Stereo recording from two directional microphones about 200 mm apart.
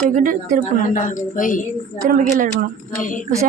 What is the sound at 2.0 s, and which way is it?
Speech, 40° right (ahead or behind).